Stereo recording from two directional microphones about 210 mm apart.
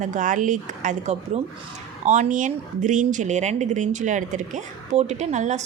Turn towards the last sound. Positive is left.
turn(degrees=-35)  # may be behind; listen again after turning